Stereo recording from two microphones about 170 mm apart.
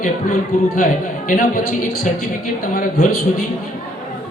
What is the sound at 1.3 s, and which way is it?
Speech, 50° left (ahead or behind).